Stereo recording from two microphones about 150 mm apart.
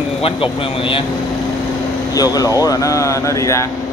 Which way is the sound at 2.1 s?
25° left (ahead or behind).